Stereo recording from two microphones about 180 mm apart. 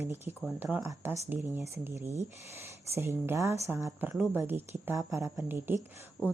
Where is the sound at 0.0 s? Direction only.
15° right (ahead or behind).